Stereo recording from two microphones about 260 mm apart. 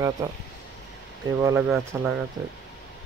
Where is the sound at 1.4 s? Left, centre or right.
Centre.